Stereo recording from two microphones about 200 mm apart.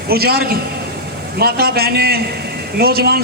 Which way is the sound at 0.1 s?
50° right (ahead or behind).